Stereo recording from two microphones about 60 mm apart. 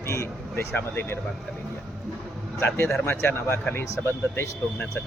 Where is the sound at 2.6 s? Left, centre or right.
Left.